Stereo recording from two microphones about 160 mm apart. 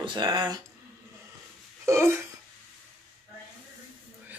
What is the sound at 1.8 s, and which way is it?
Speech, 15° right (ahead or behind).